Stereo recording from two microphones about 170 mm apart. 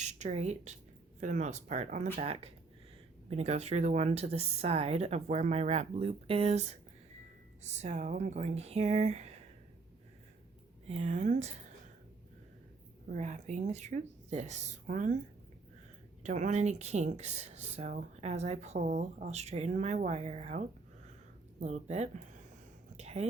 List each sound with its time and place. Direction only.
0.0 s speech: 45° right (ahead or behind)
10.8 s speech: 40° right (ahead or behind)
13.1 s speech: 45° right (ahead or behind)
16.2 s speech: 45° right (ahead or behind)
23.0 s a sound: 40° right (ahead or behind)